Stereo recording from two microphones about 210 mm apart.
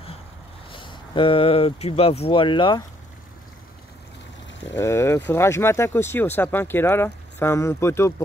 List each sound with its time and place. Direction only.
0.7 s speech: 25° left (ahead or behind)
4.7 s speech: 15° left (ahead or behind)